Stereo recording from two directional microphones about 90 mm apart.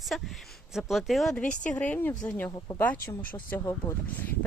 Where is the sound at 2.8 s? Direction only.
20° left (ahead or behind).